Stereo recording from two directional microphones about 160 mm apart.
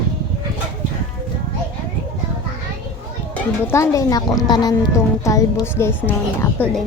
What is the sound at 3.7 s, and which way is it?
A woman's voice, 20° left (ahead or behind).